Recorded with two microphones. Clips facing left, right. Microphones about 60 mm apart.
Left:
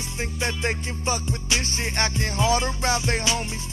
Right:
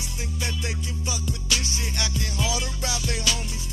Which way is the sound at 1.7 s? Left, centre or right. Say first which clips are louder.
Left 5 dB; left.